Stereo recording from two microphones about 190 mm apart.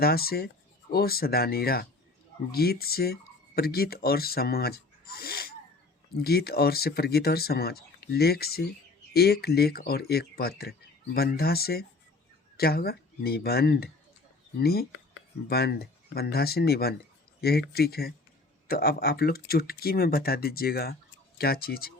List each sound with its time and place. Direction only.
0.0 s speech: 55° left (ahead or behind)